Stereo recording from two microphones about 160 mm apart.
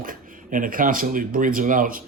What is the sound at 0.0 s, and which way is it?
Speech, 60° right (ahead or behind).